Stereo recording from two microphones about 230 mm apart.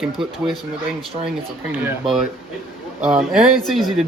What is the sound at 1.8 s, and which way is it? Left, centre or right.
Speech, centre.